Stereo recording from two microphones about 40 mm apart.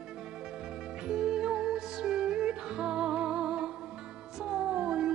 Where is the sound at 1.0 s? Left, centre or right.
Right.